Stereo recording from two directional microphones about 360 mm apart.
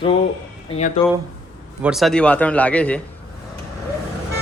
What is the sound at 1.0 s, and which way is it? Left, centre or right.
Speech, centre.